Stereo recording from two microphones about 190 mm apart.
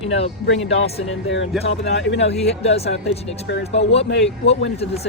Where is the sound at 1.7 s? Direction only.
70° left (ahead or behind).